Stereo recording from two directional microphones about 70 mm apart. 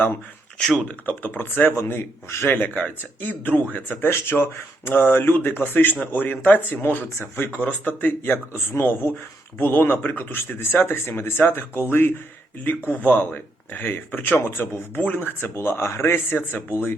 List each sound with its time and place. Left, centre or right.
0.9 s speech: left
7.6 s speech: left
8.2 s speech: left